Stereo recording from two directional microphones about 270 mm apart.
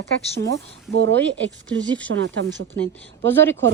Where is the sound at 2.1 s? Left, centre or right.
Right.